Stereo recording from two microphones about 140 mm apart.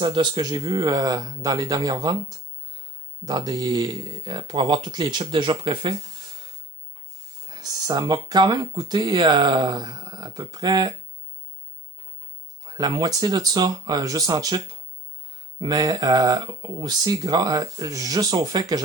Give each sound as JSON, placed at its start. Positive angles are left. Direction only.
{"t": 0.0, "sound": "speech", "side_deg": -35}
{"t": 7.4, "sound": "speech", "side_deg": -30}
{"t": 12.6, "sound": "speech", "side_deg": -25}